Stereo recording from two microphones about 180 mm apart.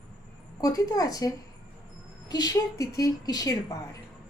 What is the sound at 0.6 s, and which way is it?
Speech, 20° left (ahead or behind).